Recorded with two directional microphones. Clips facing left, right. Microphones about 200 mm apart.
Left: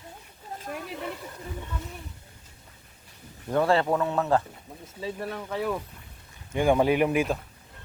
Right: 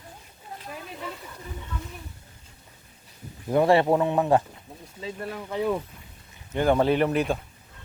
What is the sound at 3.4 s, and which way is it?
A man's voice, 15° right (ahead or behind).